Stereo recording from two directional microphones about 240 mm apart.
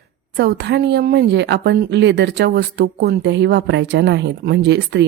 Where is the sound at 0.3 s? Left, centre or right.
Right.